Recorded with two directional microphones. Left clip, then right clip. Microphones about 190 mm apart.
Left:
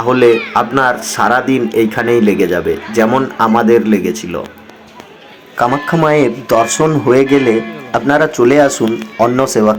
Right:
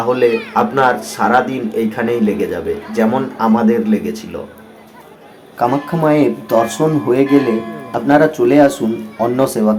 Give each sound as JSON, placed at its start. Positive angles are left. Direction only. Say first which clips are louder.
{"t": 0.1, "sound": "speech", "louder": "left 5 dB", "side_deg": 20}
{"t": 5.5, "sound": "speech", "louder": "left 3 dB", "side_deg": 10}